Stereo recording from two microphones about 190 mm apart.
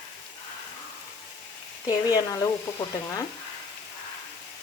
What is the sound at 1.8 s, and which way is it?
Speech, 20° left (ahead or behind).